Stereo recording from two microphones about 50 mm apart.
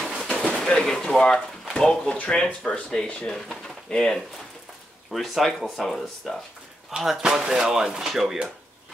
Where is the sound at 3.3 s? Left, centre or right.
Centre.